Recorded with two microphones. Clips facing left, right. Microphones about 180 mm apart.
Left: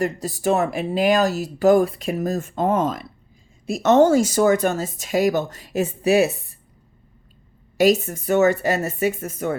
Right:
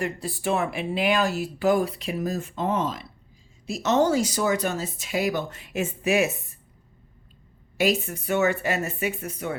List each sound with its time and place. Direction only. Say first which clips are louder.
0.0 s speech: left 6 dB; 40° left (ahead or behind)
7.8 s speech: left 7 dB; 40° left (ahead or behind)